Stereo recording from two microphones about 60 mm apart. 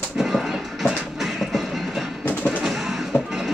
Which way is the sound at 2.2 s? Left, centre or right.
Left.